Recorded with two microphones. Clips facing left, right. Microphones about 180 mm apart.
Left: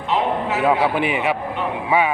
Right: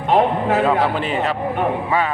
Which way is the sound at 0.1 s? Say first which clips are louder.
Right 5 dB; 50° right (ahead or behind).